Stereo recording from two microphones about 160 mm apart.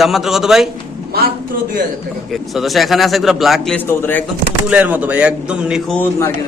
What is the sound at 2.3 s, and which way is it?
A man's voice, centre (ahead or behind).